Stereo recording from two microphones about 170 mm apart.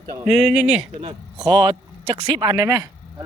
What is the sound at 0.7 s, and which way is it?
Speech, 35° right (ahead or behind).